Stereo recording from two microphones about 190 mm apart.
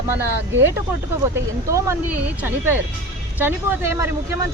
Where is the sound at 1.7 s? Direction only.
10° right (ahead or behind).